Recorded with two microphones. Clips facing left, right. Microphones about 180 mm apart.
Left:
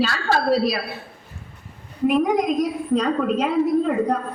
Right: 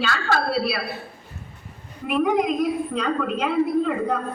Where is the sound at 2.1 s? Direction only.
40° left (ahead or behind).